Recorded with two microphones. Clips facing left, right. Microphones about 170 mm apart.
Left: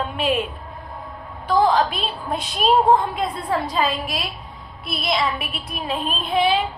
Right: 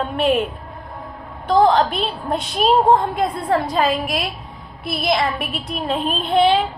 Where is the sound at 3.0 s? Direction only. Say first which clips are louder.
Right 4 dB; 50° right (ahead or behind).